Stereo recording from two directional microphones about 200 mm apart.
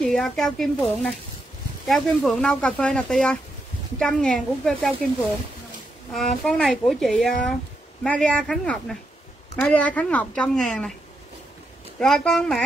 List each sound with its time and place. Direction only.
0.0 s speech: centre (ahead or behind)
6.1 s speech: 5° left (ahead or behind)
12.0 s speech: 5° left (ahead or behind)